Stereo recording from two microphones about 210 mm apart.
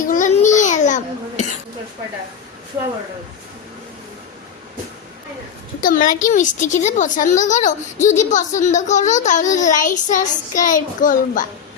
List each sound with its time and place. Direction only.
0.1 s babbling: 35° left (ahead or behind)
5.8 s a woman's voice: 40° left (ahead or behind)